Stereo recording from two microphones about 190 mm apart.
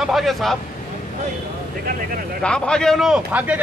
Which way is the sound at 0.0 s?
Centre (ahead or behind).